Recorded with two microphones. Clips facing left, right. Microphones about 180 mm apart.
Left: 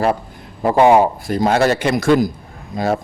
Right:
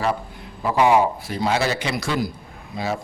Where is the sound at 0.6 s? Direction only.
50° left (ahead or behind).